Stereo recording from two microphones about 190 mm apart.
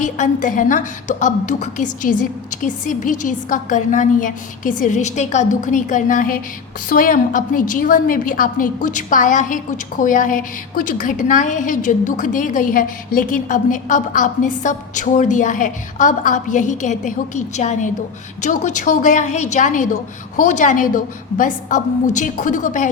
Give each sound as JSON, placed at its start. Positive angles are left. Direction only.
{"t": 0.0, "sound": "a woman's voice", "side_deg": 40}